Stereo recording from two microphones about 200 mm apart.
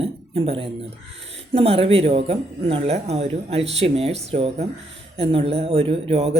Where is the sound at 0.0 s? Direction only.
30° right (ahead or behind).